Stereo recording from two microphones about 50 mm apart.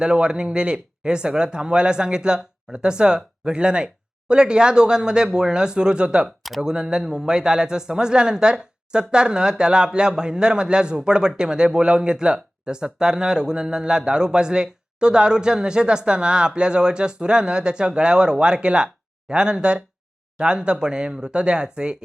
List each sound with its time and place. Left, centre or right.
0.0 s a man's voice: centre